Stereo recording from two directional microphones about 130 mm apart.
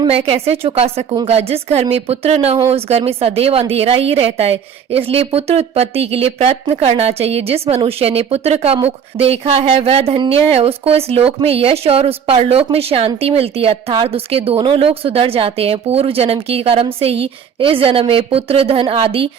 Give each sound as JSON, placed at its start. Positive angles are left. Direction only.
{"t": 0.1, "sound": "a woman's voice", "side_deg": -50}